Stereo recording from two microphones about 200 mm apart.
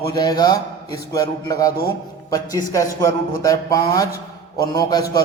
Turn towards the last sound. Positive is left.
turn(degrees=20)  # may be behind; listen again after turning